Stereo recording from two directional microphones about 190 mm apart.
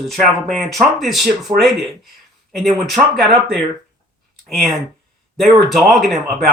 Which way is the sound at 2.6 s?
Centre (ahead or behind).